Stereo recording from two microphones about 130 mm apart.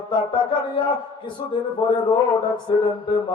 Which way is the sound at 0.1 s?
40° left (ahead or behind).